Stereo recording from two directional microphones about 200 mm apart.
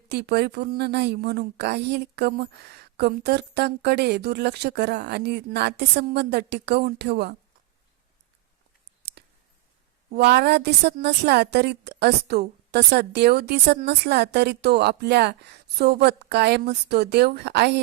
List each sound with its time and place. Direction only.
0.1 s a woman's voice: 55° right (ahead or behind)
9.2 s clicking: 50° right (ahead or behind)
10.2 s a woman's voice: 55° right (ahead or behind)